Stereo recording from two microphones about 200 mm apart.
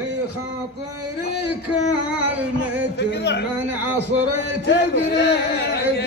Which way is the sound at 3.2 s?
60° left (ahead or behind).